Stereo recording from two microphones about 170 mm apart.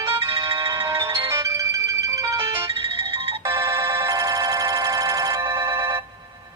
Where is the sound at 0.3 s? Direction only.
30° right (ahead or behind).